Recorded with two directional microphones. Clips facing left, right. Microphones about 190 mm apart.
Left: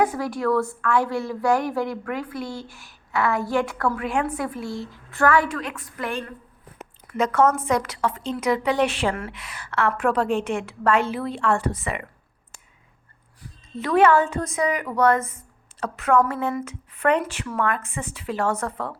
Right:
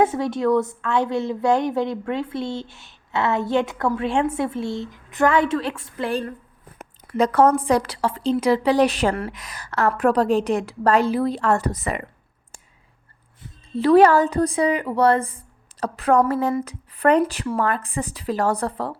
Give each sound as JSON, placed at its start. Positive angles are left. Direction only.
{"t": 0.0, "sound": "a woman's voice", "side_deg": -25}
{"t": 13.4, "sound": "speech", "side_deg": -30}